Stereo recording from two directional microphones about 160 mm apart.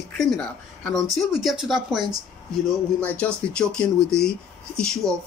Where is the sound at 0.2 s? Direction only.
5° left (ahead or behind).